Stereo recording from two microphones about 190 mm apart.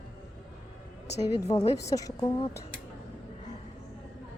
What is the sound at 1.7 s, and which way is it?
Speech, 15° left (ahead or behind).